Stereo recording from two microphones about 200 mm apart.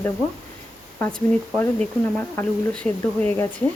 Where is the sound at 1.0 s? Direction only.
10° left (ahead or behind).